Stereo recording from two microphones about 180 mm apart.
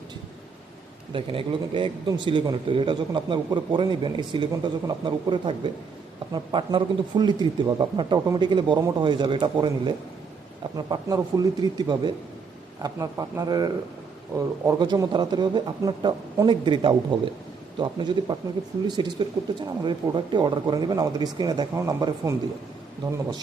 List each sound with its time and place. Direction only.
1.1 s a man's voice: 30° right (ahead or behind)